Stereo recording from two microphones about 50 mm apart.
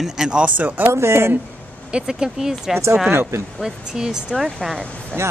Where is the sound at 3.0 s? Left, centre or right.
Right.